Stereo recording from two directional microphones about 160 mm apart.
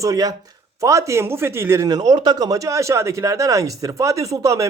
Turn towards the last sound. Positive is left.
turn(degrees=-20)  # may be behind; listen again after turning